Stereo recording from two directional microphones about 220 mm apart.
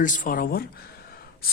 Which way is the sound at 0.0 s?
35° left (ahead or behind).